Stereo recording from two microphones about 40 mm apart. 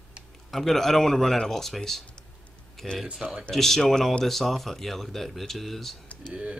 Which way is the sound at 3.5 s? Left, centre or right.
Centre.